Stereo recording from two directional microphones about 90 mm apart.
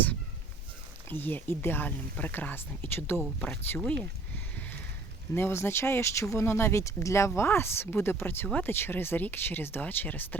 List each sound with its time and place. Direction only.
1.1 s speech: 25° left (ahead or behind)
3.8 s speech: 10° left (ahead or behind)
5.3 s speech: 25° left (ahead or behind)